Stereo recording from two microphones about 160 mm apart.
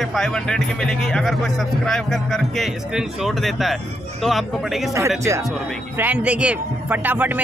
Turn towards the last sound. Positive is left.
turn(degrees=-10)  # may be behind; listen again after turning